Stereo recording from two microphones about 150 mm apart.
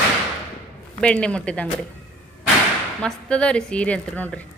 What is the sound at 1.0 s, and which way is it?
Speech, 5° left (ahead or behind).